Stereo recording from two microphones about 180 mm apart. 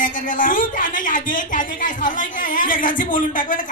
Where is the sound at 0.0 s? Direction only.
45° left (ahead or behind).